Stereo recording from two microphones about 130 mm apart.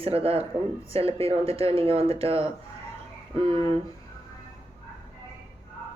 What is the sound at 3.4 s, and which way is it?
Speech, 25° left (ahead or behind).